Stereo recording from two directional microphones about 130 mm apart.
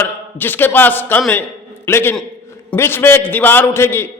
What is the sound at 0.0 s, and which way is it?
A man's voice, 15° left (ahead or behind).